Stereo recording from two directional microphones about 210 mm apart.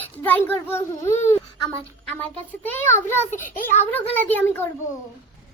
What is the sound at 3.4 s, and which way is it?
Speech, 40° left (ahead or behind).